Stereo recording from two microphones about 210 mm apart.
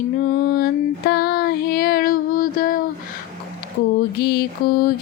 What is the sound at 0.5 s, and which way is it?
Female singing, 50° left (ahead or behind).